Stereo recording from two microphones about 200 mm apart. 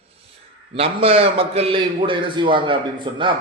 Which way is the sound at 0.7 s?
30° right (ahead or behind).